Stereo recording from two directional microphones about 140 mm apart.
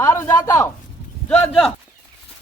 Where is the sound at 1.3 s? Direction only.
10° left (ahead or behind).